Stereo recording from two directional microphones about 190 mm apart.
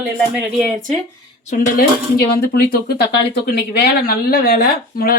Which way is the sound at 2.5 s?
55° left (ahead or behind).